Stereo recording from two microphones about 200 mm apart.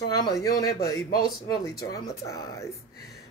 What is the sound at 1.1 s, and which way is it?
Speech, 50° left (ahead or behind).